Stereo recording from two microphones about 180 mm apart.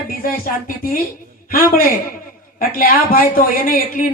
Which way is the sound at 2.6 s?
55° left (ahead or behind).